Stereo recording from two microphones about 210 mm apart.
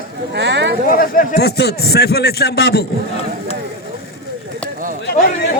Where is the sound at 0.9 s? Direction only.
40° left (ahead or behind).